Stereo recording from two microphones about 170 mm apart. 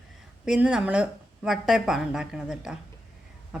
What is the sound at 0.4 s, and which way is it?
A woman's voice, 5° right (ahead or behind).